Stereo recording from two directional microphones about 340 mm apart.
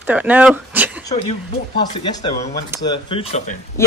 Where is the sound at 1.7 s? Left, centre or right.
Centre.